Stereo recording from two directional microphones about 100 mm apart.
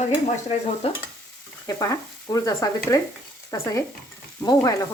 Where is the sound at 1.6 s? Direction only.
35° left (ahead or behind).